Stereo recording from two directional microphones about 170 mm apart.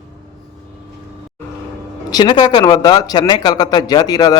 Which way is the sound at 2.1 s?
25° left (ahead or behind).